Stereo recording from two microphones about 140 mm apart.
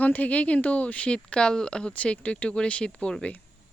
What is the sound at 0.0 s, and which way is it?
Speech, 10° left (ahead or behind).